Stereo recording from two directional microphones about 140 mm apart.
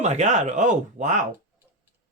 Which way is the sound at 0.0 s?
55° right (ahead or behind).